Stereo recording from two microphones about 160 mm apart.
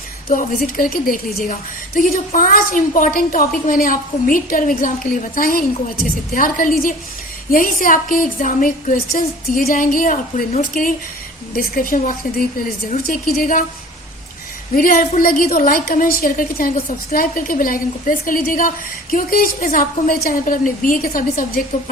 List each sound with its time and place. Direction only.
0.3 s a woman's voice: 65° left (ahead or behind)
14.8 s a woman's voice: 65° left (ahead or behind)